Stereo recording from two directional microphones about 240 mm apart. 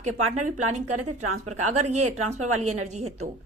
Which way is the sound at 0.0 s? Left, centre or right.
Right.